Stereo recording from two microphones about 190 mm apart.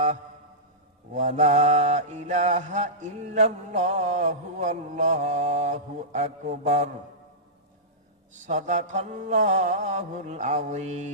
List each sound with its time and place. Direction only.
1.1 s mantra: 40° right (ahead or behind)
8.4 s mantra: 40° right (ahead or behind)